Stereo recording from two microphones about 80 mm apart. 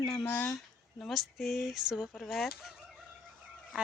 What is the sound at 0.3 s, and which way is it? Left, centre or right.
Speech, left.